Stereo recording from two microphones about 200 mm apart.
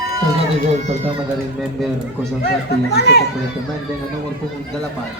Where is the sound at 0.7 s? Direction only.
35° right (ahead or behind).